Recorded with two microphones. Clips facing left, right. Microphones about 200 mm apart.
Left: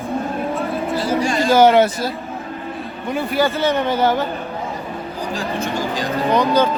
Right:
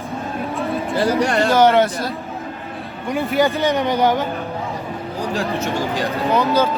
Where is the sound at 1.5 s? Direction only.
5° left (ahead or behind).